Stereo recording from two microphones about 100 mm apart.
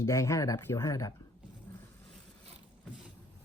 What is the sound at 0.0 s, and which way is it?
Speech, 30° left (ahead or behind).